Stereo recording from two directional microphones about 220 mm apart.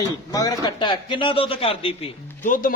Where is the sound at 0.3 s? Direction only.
20° left (ahead or behind).